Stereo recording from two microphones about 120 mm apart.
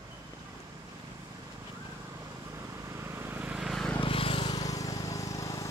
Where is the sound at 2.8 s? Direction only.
25° right (ahead or behind); by 3.9 s centre (ahead or behind).